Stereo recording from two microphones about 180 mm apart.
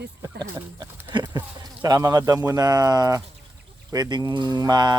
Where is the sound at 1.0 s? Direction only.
25° right (ahead or behind).